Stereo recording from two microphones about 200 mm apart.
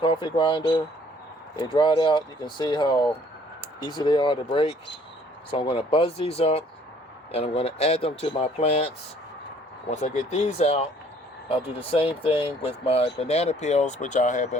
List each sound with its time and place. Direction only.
0.0 s speech: 25° left (ahead or behind)
9.9 s speech: 35° left (ahead or behind)